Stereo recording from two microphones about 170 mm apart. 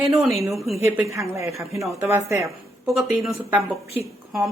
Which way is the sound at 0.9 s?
15° right (ahead or behind).